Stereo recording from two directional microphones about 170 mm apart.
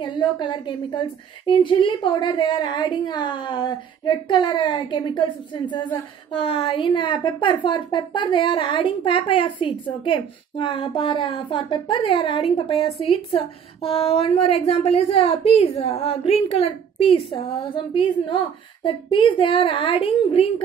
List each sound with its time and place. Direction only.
0.0 s a woman's voice: 25° left (ahead or behind)